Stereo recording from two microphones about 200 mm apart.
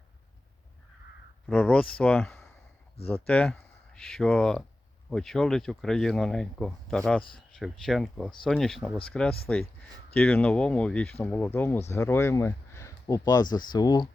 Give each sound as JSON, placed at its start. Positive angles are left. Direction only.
{"t": 1.5, "sound": "speech", "side_deg": 5}